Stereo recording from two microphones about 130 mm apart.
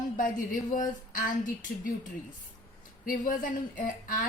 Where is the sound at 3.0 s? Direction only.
90° left.